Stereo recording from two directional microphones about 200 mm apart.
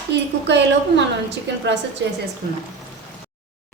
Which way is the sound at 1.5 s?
60° right (ahead or behind).